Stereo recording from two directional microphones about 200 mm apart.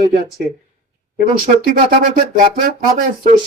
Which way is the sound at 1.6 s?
45° right (ahead or behind).